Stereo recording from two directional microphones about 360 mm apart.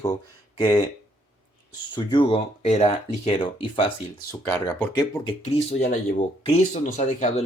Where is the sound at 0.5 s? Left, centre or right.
Centre.